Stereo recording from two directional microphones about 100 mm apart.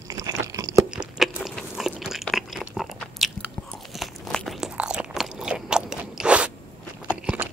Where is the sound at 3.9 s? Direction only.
Centre (ahead or behind).